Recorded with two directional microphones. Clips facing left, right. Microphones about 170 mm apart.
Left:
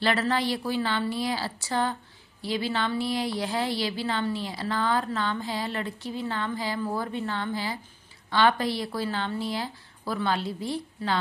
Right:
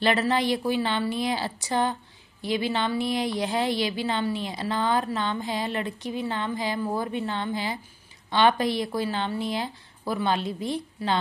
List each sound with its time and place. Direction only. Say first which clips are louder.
0.0 s a woman's voice: right 2 dB; 20° right (ahead or behind)